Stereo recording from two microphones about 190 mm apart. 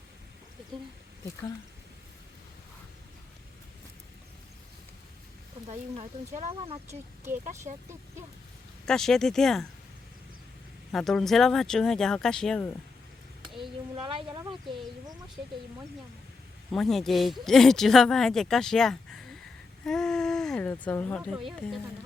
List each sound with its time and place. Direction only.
5.6 s speech: 35° right (ahead or behind)
8.9 s a woman's voice: 5° left (ahead or behind)
10.9 s a woman's voice: centre (ahead or behind)
13.6 s speech: 25° right (ahead or behind)
16.7 s a woman's voice: centre (ahead or behind)